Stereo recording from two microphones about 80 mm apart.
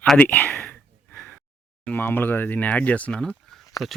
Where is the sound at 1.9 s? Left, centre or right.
Left.